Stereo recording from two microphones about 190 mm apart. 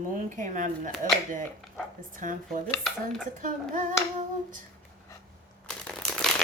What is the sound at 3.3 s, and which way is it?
Speech, 45° right (ahead or behind).